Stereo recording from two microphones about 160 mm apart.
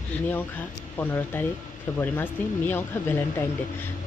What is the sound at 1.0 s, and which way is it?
A woman's voice, 15° left (ahead or behind).